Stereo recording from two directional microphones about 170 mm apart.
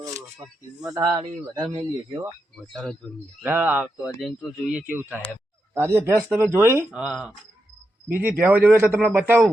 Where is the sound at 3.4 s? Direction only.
10° right (ahead or behind).